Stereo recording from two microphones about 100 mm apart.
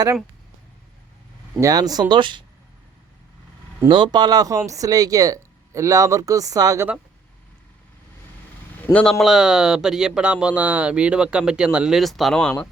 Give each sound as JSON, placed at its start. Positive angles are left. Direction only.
{"t": 1.6, "sound": "speech", "side_deg": -40}
{"t": 3.8, "sound": "speech", "side_deg": -50}
{"t": 8.9, "sound": "speech", "side_deg": 15}
{"t": 9.1, "sound": "speech", "side_deg": -5}